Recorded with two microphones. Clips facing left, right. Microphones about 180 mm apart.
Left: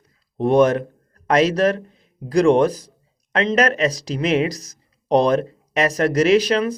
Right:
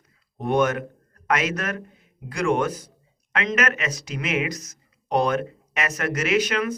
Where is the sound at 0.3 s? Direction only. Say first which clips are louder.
Left 7 dB; 35° left (ahead or behind).